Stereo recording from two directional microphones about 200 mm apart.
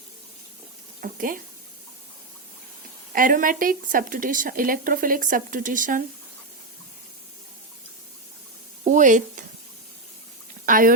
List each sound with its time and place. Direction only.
1.0 s a woman's voice: 45° right (ahead or behind)
3.1 s a woman's voice: 45° right (ahead or behind)
8.8 s speech: 40° right (ahead or behind)
10.7 s a woman's voice: 45° right (ahead or behind)